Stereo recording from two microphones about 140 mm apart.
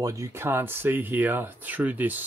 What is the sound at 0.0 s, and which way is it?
Speech, 20° right (ahead or behind).